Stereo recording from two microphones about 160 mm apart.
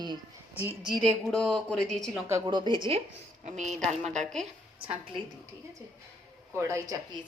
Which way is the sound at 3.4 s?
50° right (ahead or behind).